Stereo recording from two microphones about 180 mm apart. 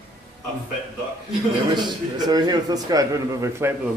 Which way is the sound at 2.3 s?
20° right (ahead or behind).